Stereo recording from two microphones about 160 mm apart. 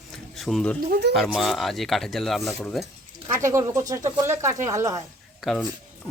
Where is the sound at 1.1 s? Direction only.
Centre (ahead or behind).